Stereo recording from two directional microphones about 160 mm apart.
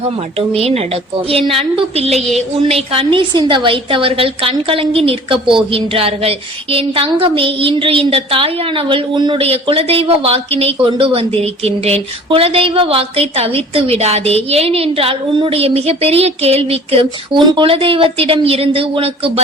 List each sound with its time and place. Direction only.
0.3 s speech: 40° right (ahead or behind)
2.1 s a sound: centre (ahead or behind)
2.6 s speech: 35° right (ahead or behind)